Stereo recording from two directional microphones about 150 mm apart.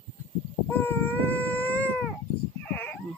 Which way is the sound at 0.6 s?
15° left (ahead or behind).